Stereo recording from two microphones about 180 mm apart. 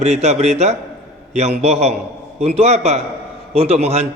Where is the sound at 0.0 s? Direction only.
40° right (ahead or behind).